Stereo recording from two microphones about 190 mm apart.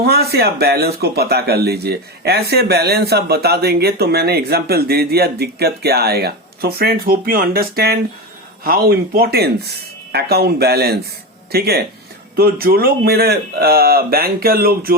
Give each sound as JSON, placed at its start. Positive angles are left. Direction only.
{"t": 0.0, "sound": "speech", "side_deg": -55}